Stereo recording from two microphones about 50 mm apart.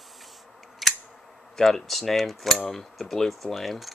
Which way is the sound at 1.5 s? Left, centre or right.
Centre.